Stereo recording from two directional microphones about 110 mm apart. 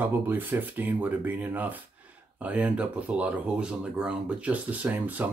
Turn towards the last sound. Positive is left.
turn(degrees=-15)  # may be behind; listen again after turning